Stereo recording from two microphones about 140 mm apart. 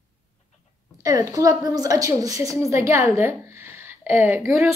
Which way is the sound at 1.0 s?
25° right (ahead or behind).